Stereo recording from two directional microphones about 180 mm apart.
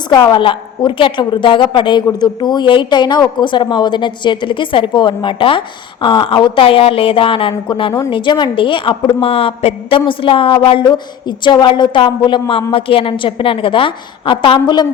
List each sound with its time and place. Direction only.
0.1 s a woman's voice: 20° left (ahead or behind)